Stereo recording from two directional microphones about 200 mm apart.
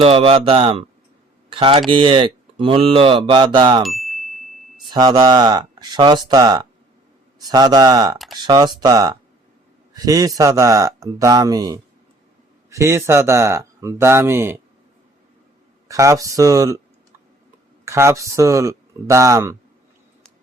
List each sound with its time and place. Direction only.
0.0 s speech: 30° right (ahead or behind)
3.8 s ding: centre (ahead or behind)
4.9 s speech: 20° right (ahead or behind)
15.9 s speech: 15° right (ahead or behind)
17.8 s speech: 15° right (ahead or behind)